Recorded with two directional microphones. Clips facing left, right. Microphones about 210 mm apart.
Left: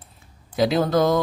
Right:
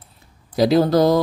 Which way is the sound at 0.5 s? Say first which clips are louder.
Right 4 dB; 35° right (ahead or behind).